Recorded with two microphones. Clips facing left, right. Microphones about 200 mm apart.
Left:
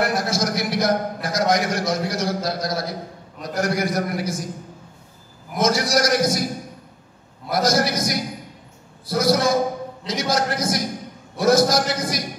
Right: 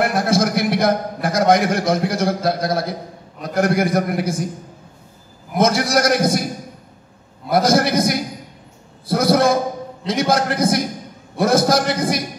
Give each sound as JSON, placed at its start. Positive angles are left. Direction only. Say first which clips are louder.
{"t": 0.0, "sound": "a man's voice", "louder": "right 5 dB", "side_deg": -55}
{"t": 5.6, "sound": "a man's voice", "louder": "right 3 dB", "side_deg": -55}
{"t": 7.4, "sound": "a man's voice", "louder": "right 4 dB", "side_deg": -55}